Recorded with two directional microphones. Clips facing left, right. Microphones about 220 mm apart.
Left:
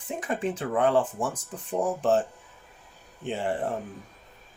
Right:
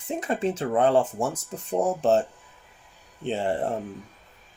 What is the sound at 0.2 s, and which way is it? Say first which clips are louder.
Speech: right 3 dB; 25° right (ahead or behind).